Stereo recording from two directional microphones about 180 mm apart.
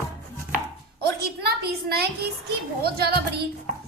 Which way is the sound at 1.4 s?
60° right (ahead or behind).